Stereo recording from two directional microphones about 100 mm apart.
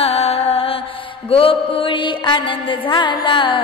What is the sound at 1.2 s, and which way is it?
Mantra, 70° left (ahead or behind).